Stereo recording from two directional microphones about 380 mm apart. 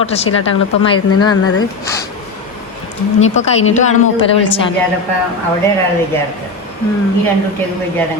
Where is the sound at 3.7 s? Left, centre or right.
Left.